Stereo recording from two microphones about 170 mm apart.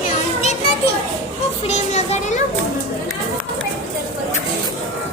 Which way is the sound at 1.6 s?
40° left (ahead or behind).